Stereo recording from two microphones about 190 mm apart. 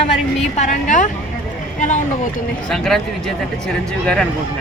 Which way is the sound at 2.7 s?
Centre (ahead or behind).